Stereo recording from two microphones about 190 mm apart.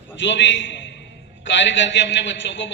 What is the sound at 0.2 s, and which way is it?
A man's voice, 70° left (ahead or behind).